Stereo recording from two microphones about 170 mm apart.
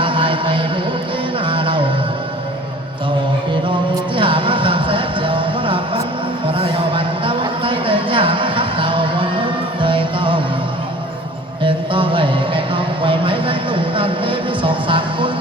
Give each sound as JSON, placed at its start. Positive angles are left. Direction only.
{"t": 0.0, "sound": "music", "side_deg": -30}
{"t": 4.1, "sound": "a sound", "side_deg": -30}
{"t": 9.8, "sound": "music", "side_deg": -30}
{"t": 11.6, "sound": "music", "side_deg": -30}